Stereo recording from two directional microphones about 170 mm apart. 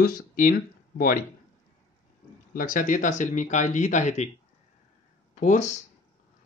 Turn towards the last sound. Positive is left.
turn(degrees=45)  # may be behind; listen again after turning